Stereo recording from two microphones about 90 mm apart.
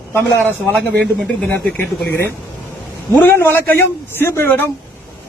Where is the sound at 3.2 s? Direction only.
25° left (ahead or behind).